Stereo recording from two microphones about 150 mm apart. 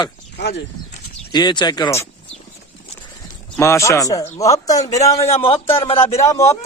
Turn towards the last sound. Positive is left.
turn(degrees=20)  # may be behind; listen again after turning